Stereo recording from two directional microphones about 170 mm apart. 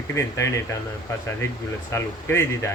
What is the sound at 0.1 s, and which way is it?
Speech, 15° left (ahead or behind).